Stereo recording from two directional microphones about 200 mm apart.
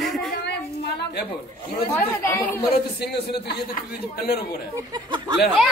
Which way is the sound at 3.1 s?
55° left (ahead or behind).